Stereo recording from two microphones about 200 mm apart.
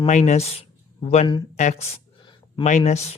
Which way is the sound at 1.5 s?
35° left (ahead or behind).